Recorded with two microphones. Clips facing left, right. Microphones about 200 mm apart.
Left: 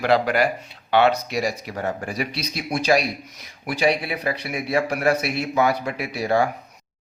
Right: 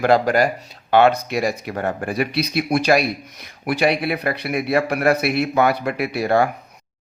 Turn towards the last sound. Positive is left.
turn(degrees=-60)  # may be behind; listen again after turning